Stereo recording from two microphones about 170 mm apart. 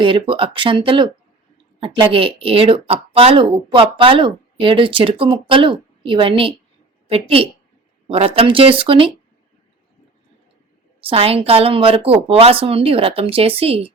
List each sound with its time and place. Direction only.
0.0 s speech: 30° right (ahead or behind)
11.0 s speech: 35° right (ahead or behind)